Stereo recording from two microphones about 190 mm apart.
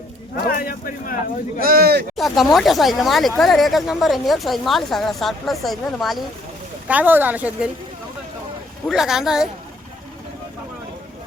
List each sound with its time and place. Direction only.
0.4 s speech: 50° left (ahead or behind)
1.6 s speech: 50° right (ahead or behind)
2.1 s speech: centre (ahead or behind)
8.9 s speech: centre (ahead or behind)